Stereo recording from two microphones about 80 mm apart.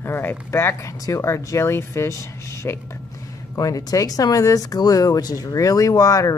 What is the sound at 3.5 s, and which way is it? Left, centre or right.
Speech, left.